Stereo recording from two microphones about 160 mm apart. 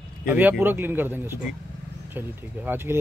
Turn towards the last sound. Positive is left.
turn(degrees=-15)  # may be behind; listen again after turning